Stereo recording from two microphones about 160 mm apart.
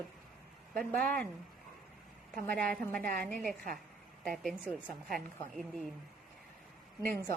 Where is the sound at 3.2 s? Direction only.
60° right (ahead or behind).